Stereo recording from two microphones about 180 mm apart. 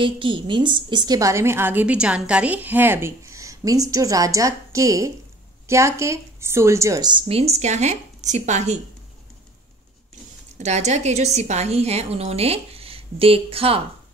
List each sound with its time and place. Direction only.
0.0 s a woman's voice: 30° right (ahead or behind)
10.6 s a woman's voice: 40° right (ahead or behind)